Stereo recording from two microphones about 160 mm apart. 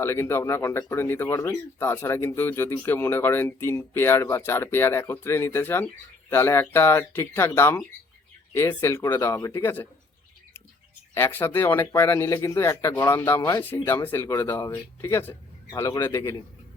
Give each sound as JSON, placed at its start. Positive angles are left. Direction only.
{"t": 0.0, "sound": "speech", "side_deg": 15}
{"t": 11.1, "sound": "a man's voice", "side_deg": 15}